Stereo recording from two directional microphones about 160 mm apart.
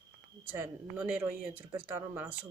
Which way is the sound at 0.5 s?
10° right (ahead or behind).